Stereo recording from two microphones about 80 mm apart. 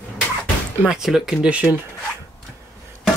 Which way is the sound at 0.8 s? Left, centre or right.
Centre.